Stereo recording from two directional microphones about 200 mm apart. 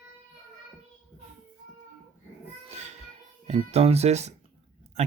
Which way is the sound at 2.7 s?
35° right (ahead or behind).